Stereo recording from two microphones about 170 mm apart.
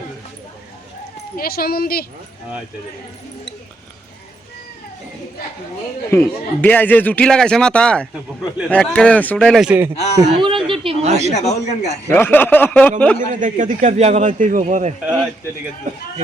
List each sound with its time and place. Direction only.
1.4 s speech: 60° left (ahead or behind)
6.1 s a man's voice: 10° left (ahead or behind)
8.1 s a man's voice: 5° right (ahead or behind)
8.7 s a man's voice: 5° left (ahead or behind)
9.6 s a man's voice: 10° right (ahead or behind)
10.3 s a woman's voice: 30° right (ahead or behind)
11.3 s speech: 40° left (ahead or behind)
12.0 s a man's voice: 10° left (ahead or behind)
13.1 s a man's voice: 50° right (ahead or behind)